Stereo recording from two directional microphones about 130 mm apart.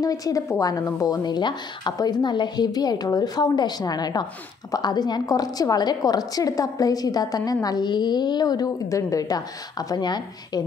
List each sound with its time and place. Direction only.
0.0 s speech: 30° left (ahead or behind)